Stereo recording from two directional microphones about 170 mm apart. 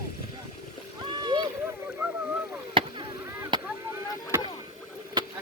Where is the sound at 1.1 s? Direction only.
25° right (ahead or behind).